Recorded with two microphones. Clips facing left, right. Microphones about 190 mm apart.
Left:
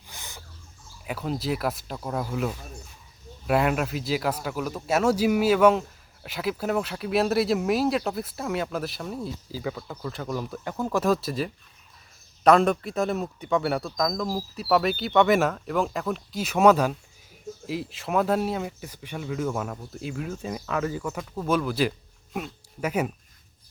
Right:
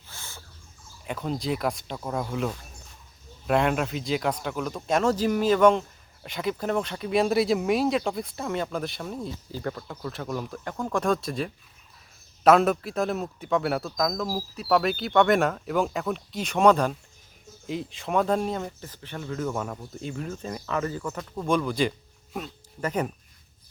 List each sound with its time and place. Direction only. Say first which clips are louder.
0.1 s owl: left 1 dB; 15° left (ahead or behind)
1.0 s speech: even; 5° left (ahead or behind)